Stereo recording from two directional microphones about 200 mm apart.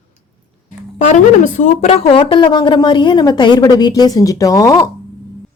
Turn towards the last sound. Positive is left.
turn(degrees=15)  # may be behind; listen again after turning